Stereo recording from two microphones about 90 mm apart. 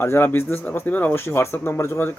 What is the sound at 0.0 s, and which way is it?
Speech, 25° left (ahead or behind).